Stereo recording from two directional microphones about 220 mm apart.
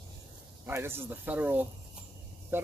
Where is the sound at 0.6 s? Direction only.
10° right (ahead or behind).